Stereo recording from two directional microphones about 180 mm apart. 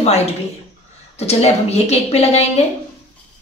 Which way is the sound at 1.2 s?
35° left (ahead or behind).